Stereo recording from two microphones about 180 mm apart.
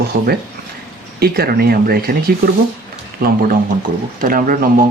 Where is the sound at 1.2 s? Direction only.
60° right (ahead or behind).